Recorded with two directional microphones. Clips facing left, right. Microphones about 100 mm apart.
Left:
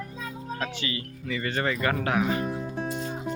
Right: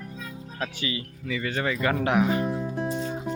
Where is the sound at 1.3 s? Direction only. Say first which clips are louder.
Even; 5° right (ahead or behind).